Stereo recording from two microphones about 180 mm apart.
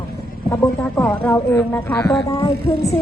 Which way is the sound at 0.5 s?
10° left (ahead or behind).